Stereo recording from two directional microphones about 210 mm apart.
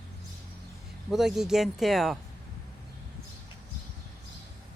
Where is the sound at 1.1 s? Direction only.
Centre (ahead or behind).